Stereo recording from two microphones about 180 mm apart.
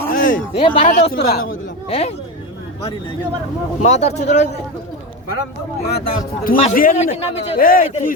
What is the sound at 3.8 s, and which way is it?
Speech, 40° left (ahead or behind).